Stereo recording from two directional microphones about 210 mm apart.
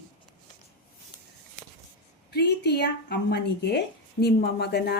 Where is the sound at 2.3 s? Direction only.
50° left (ahead or behind).